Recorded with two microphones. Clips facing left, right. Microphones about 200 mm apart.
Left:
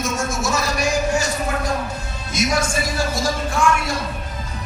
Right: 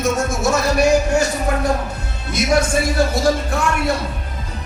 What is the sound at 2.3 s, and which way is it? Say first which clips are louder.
Speech: right 4 dB; 60° right (ahead or behind).